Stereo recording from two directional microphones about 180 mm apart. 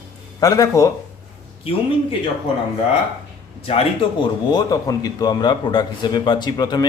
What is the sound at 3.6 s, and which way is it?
A man's voice, 30° left (ahead or behind).